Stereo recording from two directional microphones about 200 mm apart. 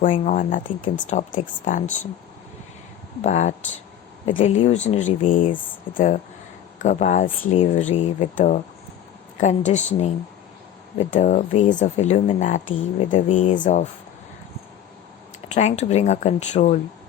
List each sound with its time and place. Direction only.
0.0 s speech: 40° left (ahead or behind)
3.2 s speech: 35° left (ahead or behind)
6.7 s speech: 35° left (ahead or behind)
11.1 s speech: 35° left (ahead or behind)
15.5 s speech: 35° left (ahead or behind)